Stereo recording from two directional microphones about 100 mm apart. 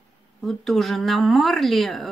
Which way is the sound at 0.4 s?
Centre (ahead or behind).